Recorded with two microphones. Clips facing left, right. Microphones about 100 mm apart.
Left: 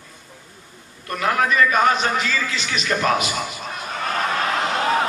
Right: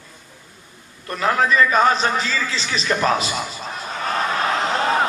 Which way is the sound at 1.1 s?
30° right (ahead or behind).